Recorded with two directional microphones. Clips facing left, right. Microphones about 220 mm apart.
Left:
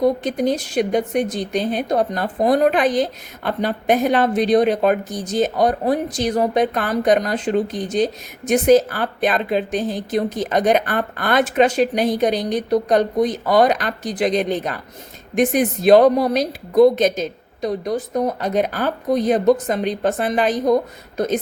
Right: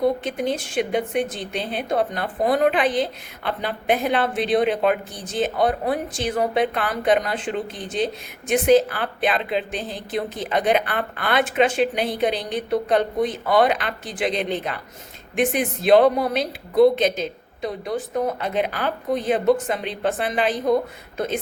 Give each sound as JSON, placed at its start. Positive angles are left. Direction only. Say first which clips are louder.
{"t": 0.0, "sound": "a woman's voice", "louder": "left 4 dB", "side_deg": 40}